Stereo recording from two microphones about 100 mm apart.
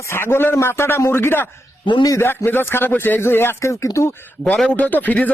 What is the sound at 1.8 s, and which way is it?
Speech, 50° left (ahead or behind).